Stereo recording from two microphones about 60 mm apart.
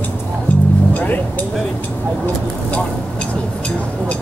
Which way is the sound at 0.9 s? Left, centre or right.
Left.